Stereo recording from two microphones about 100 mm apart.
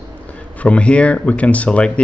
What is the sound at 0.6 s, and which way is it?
Speech, 15° left (ahead or behind).